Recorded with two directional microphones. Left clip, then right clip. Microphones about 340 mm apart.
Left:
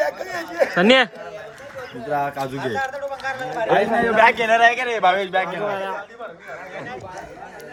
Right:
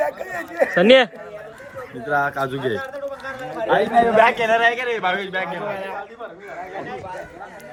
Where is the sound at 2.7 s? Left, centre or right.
Left.